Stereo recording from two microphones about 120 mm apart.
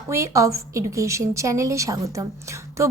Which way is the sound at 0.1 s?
25° right (ahead or behind).